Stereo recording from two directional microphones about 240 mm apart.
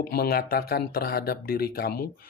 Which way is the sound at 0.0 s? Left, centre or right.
Left.